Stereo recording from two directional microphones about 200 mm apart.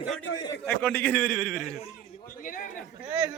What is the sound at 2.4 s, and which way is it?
Speech, 40° left (ahead or behind).